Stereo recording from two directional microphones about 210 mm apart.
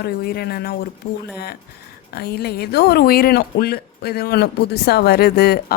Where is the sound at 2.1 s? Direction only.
50° left (ahead or behind).